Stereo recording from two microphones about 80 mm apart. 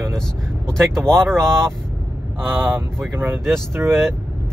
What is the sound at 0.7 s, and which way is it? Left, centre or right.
Speech, centre.